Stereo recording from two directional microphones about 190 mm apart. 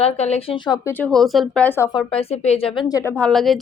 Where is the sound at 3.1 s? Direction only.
5° left (ahead or behind).